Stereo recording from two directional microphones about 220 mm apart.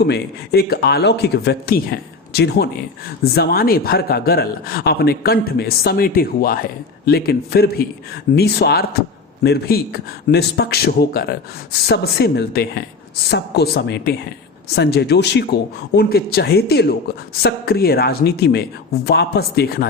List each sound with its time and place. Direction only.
0.0 s a man's voice: 45° left (ahead or behind)